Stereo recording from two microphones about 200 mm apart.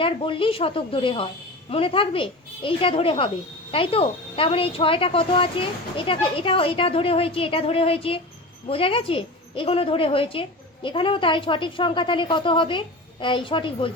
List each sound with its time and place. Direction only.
0.0 s a woman's voice: 25° left (ahead or behind)